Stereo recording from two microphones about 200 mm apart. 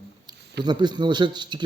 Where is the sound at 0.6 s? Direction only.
20° right (ahead or behind).